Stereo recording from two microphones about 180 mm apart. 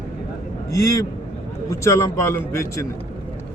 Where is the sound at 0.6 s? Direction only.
20° left (ahead or behind).